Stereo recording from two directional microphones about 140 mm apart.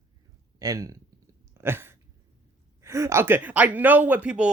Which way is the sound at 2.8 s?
20° right (ahead or behind).